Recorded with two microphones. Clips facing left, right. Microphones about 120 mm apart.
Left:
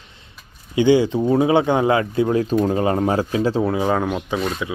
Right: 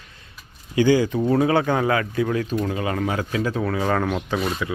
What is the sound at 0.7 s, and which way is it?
Speech, 20° left (ahead or behind).